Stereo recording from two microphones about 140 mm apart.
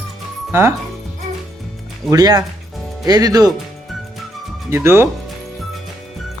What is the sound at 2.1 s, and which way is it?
Speech, 25° right (ahead or behind).